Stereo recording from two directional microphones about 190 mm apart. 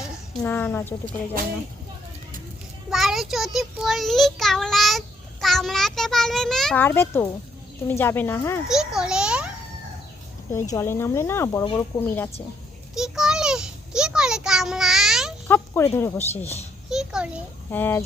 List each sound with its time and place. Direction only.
0.4 s speech: 10° left (ahead or behind)
2.9 s a child's voice: centre (ahead or behind)
8.6 s a child's voice: 5° right (ahead or behind)
10.5 s speech: 15° left (ahead or behind)
12.9 s a sound: 5° right (ahead or behind)
15.4 s a sound: 10° left (ahead or behind)
16.0 s speech: 15° left (ahead or behind)
16.9 s a sound: 5° right (ahead or behind)
17.7 s speech: 10° left (ahead or behind)